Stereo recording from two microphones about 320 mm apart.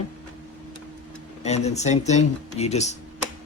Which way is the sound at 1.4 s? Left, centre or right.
Left.